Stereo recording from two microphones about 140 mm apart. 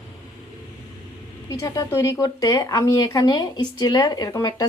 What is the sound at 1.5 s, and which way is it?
Speech, 25° left (ahead or behind).